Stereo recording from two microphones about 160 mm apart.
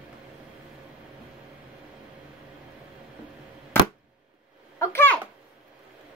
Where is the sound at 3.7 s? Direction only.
15° left (ahead or behind).